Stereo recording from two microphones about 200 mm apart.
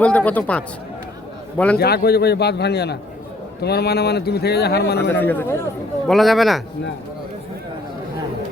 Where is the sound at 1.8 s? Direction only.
50° left (ahead or behind).